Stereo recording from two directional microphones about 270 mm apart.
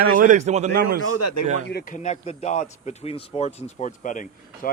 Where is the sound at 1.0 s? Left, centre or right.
Left.